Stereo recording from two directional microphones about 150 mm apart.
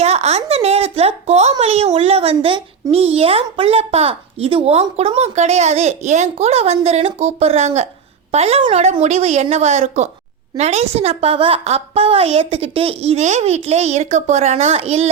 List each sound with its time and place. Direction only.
0.0 s speech: 45° right (ahead or behind)